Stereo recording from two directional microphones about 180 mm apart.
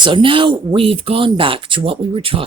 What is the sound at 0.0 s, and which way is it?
Speech, 25° right (ahead or behind).